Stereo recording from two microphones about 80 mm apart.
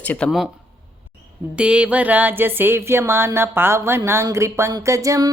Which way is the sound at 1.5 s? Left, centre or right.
Centre.